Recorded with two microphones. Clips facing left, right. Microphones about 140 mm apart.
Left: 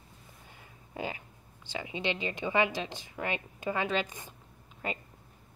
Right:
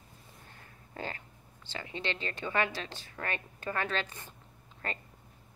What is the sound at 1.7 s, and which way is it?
Speech, 15° left (ahead or behind).